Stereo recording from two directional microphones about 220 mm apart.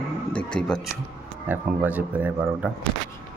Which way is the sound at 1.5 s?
10° right (ahead or behind).